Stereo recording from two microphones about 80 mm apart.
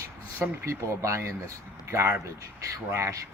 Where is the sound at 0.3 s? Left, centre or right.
Right.